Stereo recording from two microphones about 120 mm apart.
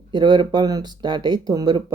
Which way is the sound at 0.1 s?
40° right (ahead or behind).